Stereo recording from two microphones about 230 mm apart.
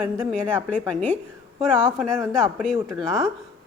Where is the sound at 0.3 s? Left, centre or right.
Centre.